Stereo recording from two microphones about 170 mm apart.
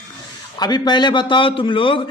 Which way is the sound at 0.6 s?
25° left (ahead or behind).